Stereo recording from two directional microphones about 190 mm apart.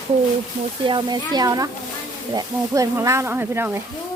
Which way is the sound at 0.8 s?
25° right (ahead or behind).